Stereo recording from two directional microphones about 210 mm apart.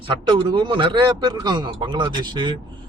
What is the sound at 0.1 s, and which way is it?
A man's voice, 20° right (ahead or behind).